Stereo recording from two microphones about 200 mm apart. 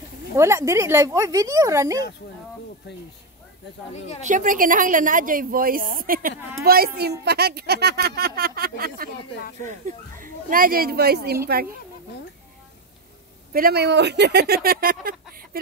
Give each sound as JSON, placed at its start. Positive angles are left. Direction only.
{"t": 0.3, "sound": "speech", "side_deg": -15}
{"t": 4.2, "sound": "a woman's voice", "side_deg": -40}
{"t": 13.5, "sound": "a woman's voice", "side_deg": -50}